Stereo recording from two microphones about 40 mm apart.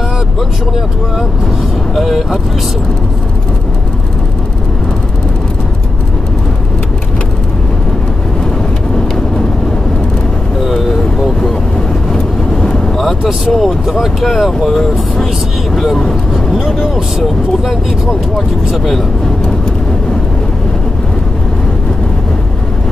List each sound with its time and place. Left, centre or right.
2.0 s speech: centre
10.7 s vehicle: centre
12.6 s vehicle: centre
13.5 s speech: centre
16.5 s speech: centre